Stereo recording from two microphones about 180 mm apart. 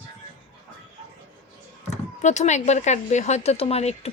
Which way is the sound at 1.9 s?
40° left (ahead or behind).